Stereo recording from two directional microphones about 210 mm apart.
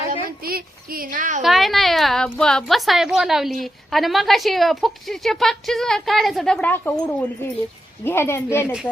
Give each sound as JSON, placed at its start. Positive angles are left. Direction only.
{"t": 0.4, "sound": "speech", "side_deg": -45}
{"t": 1.4, "sound": "a woman's voice", "side_deg": 0}